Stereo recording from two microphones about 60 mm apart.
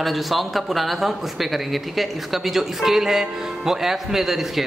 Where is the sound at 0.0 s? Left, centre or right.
Centre.